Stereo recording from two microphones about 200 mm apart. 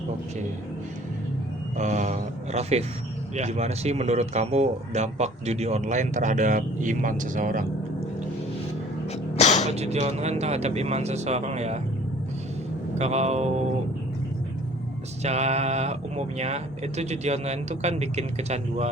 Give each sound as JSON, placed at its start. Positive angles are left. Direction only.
{"t": 1.7, "sound": "a sound", "side_deg": -35}
{"t": 3.3, "sound": "speech", "side_deg": -35}
{"t": 9.3, "sound": "a sound", "side_deg": 35}
{"t": 9.6, "sound": "speech", "side_deg": -35}
{"t": 13.0, "sound": "speech", "side_deg": -35}
{"t": 15.2, "sound": "speech", "side_deg": -35}